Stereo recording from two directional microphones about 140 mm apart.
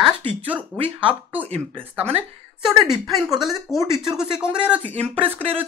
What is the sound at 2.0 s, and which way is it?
Speech, 50° right (ahead or behind).